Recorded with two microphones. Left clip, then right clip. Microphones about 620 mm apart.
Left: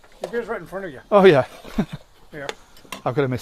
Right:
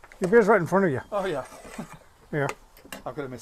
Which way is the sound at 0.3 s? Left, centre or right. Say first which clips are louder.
Right 10 dB; right.